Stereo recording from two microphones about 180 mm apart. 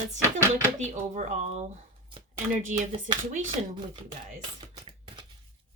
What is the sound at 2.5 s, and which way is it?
Speech, 45° right (ahead or behind).